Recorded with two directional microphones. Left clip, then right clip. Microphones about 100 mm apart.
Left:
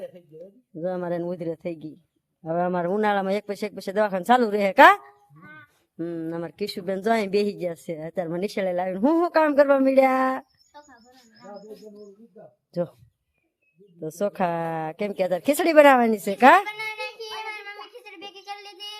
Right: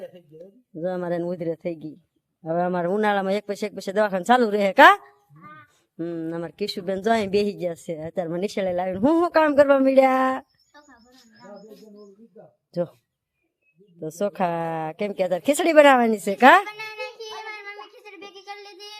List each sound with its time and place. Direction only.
0.3 s speech: 15° right (ahead or behind)
5.3 s dog: 5° left (ahead or behind)
6.0 s speech: 10° right (ahead or behind)
11.3 s bird: 5° right (ahead or behind)
12.7 s speech: centre (ahead or behind)
14.0 s speech: 5° right (ahead or behind)
16.6 s a sound: 10° left (ahead or behind)
17.4 s child singing: 5° left (ahead or behind)